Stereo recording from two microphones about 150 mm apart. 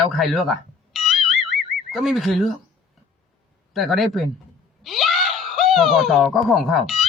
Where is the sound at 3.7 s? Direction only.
Centre (ahead or behind).